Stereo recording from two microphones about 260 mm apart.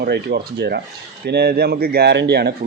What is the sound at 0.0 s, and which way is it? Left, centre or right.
A man's voice, right.